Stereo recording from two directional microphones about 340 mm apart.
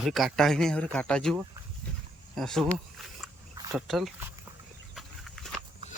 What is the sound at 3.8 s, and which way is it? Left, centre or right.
Speech, centre.